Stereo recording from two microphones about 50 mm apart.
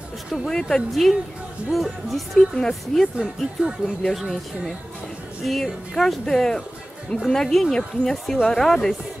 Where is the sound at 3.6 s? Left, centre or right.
Centre.